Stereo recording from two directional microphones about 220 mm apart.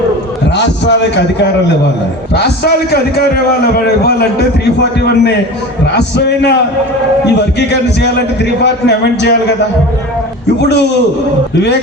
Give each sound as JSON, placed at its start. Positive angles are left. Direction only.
{"t": 0.5, "sound": "a man's voice", "side_deg": 50}